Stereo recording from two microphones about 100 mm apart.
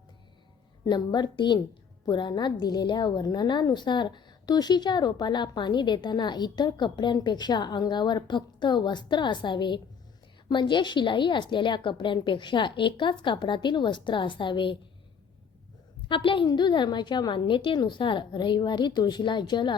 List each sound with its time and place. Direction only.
0.9 s a woman's voice: 45° left (ahead or behind)
16.0 s a woman's voice: 60° left (ahead or behind)